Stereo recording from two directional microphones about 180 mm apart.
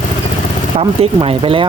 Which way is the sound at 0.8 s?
30° right (ahead or behind).